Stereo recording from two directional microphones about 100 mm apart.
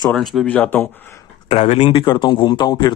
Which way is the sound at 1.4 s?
90° left.